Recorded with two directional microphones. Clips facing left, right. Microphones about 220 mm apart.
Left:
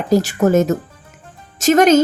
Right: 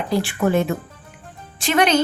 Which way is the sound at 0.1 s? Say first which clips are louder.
Left 6 dB; 40° left (ahead or behind).